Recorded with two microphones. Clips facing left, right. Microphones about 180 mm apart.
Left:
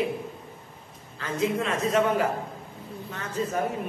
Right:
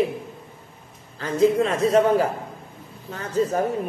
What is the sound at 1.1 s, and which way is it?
A man's voice, 35° right (ahead or behind).